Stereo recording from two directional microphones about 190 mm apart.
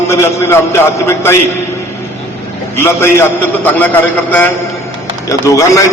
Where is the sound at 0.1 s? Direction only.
15° left (ahead or behind).